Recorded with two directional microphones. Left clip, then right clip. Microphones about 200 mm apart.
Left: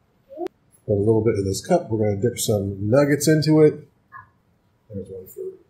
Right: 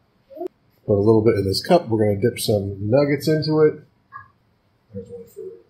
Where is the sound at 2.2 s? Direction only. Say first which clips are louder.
Right 2 dB; 5° right (ahead or behind).